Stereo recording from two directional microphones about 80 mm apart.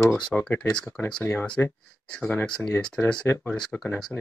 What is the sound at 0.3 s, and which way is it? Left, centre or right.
Speech, centre.